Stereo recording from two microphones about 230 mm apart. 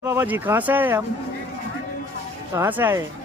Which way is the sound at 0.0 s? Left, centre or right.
Centre.